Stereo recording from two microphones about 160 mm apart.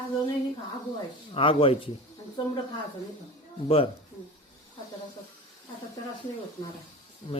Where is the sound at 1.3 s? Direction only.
35° left (ahead or behind).